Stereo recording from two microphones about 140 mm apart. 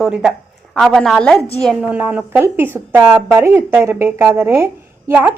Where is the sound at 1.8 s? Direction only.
10° right (ahead or behind).